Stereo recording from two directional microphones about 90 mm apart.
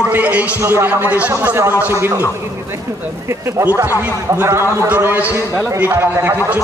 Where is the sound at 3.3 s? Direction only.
30° right (ahead or behind).